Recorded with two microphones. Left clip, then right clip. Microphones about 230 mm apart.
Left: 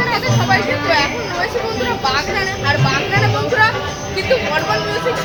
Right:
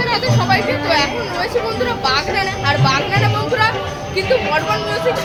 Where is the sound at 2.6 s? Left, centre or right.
Centre.